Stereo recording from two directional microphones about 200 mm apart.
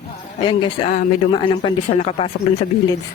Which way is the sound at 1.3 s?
25° left (ahead or behind).